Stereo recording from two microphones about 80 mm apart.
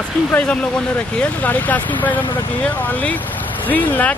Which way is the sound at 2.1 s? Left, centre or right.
Left.